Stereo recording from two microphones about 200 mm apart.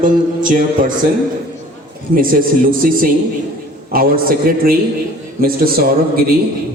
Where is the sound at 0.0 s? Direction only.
45° right (ahead or behind).